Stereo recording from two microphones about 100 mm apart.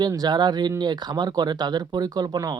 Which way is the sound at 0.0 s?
40° right (ahead or behind).